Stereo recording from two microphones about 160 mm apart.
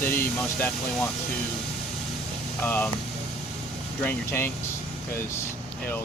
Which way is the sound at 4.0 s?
15° left (ahead or behind).